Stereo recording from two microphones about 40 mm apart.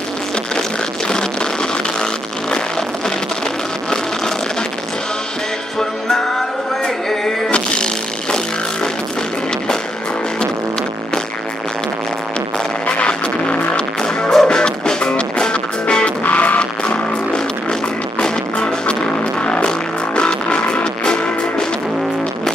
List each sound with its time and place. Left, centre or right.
0.6 s a sound: centre
5.8 s music: centre
7.5 s a sound: left
12.8 s music: left
16.3 s music: left
16.8 s music: left
20.2 s music: left